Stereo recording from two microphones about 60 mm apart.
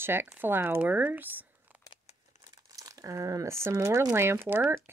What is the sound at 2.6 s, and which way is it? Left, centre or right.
Crumpling, right.